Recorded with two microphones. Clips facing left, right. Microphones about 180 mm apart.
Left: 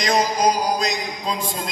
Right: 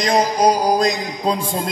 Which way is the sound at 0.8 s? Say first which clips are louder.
Right 6 dB; 55° right (ahead or behind).